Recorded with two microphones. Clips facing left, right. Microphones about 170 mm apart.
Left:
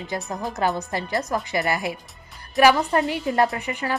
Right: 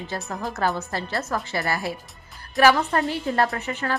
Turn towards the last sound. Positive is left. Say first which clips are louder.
# left 2 dB
turn(degrees=15)  # may be behind; listen again after turning